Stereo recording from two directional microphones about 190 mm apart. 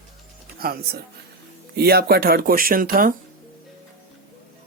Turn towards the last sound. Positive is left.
turn(degrees=-50)  # may be behind; listen again after turning